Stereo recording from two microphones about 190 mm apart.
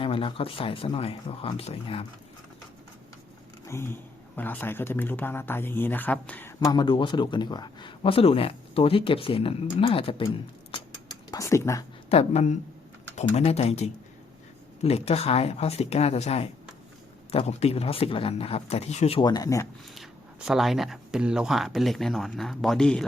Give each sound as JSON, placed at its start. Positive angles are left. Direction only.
{"t": 0.0, "sound": "speech", "side_deg": 30}
{"t": 3.7, "sound": "speech", "side_deg": 15}
{"t": 12.0, "sound": "speech", "side_deg": 35}
{"t": 20.0, "sound": "speech", "side_deg": 0}